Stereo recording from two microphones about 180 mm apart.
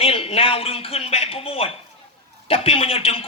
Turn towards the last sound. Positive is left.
turn(degrees=30)  # may be behind; listen again after turning